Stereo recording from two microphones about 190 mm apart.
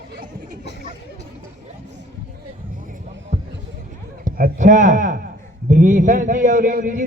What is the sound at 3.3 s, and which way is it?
Basketball bounce, 35° right (ahead or behind).